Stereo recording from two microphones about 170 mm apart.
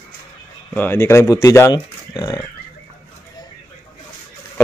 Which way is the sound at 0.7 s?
10° left (ahead or behind).